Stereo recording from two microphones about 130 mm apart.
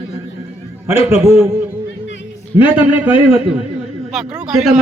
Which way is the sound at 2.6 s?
10° right (ahead or behind).